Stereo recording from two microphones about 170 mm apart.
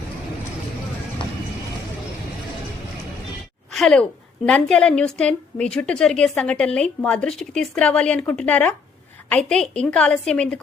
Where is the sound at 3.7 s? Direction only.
5° left (ahead or behind).